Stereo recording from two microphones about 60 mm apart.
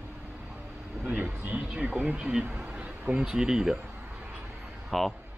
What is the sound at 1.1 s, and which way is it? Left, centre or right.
Speech, right.